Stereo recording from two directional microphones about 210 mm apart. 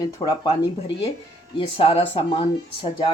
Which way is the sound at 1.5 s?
25° left (ahead or behind).